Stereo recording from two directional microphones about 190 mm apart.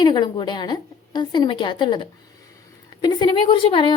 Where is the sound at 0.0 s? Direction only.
25° left (ahead or behind).